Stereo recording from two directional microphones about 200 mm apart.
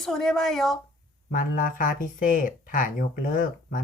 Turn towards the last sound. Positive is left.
turn(degrees=40)  # may be behind; listen again after turning